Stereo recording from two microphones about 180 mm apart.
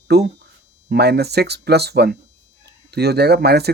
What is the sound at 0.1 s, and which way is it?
Speech, 65° right (ahead or behind).